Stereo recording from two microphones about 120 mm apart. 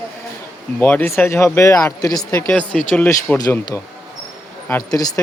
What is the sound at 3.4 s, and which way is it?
Speech, 25° left (ahead or behind).